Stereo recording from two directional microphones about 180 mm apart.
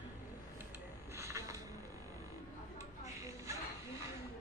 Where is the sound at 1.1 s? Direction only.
15° right (ahead or behind).